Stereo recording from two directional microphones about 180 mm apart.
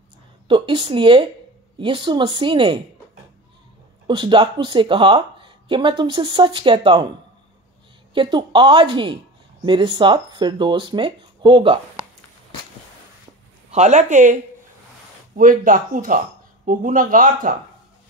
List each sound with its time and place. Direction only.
0.5 s speech: 25° right (ahead or behind)
4.1 s speech: 25° right (ahead or behind)
8.1 s speech: 25° right (ahead or behind)
13.7 s speech: 40° right (ahead or behind)